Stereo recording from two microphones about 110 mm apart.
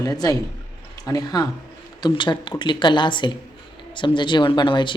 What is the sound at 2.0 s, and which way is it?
Speech, 45° left (ahead or behind).